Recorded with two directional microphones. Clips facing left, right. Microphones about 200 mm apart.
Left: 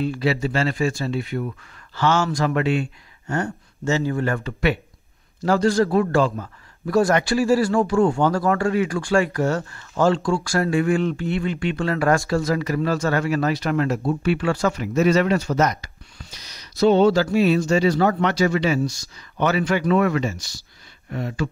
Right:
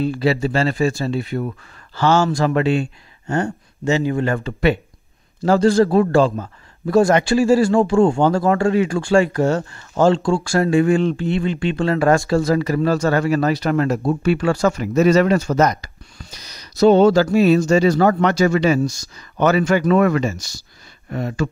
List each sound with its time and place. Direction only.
0.0 s speech: 35° right (ahead or behind)
3.9 s a man's voice: 15° right (ahead or behind); by 21.5 s 45° right (ahead or behind)